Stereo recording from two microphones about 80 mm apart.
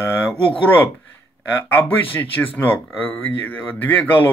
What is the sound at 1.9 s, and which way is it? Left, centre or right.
A man's voice, left.